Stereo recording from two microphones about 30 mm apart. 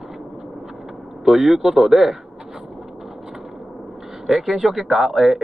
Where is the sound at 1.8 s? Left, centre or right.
Centre.